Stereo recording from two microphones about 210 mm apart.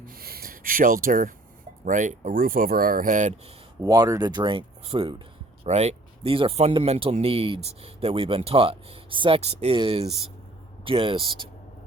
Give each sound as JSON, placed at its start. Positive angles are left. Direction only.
{"t": 0.0, "sound": "a sound", "side_deg": -45}
{"t": 1.8, "sound": "speech", "side_deg": -35}
{"t": 3.8, "sound": "speech", "side_deg": -15}